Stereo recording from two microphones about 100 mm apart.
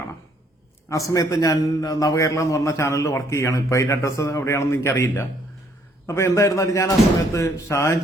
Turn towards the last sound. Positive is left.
turn(degrees=25)  # may be behind; listen again after turning